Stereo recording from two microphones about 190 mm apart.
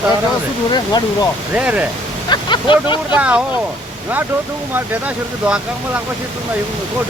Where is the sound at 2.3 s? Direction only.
25° left (ahead or behind).